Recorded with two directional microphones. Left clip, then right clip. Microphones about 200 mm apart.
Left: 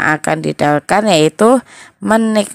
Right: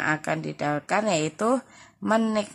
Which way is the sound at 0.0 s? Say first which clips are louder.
Left 12 dB; 40° left (ahead or behind).